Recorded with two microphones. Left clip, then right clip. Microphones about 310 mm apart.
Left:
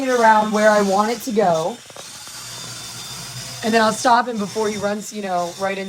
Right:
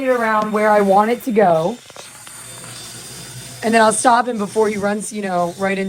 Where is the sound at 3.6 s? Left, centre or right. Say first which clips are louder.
Right 3 dB; right.